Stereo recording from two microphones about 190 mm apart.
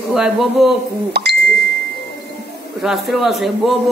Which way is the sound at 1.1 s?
60° right (ahead or behind).